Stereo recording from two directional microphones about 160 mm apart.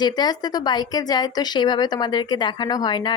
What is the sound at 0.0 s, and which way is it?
Speech, 25° left (ahead or behind).